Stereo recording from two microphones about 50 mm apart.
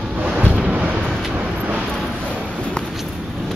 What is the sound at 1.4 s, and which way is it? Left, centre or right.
Vehicle, right.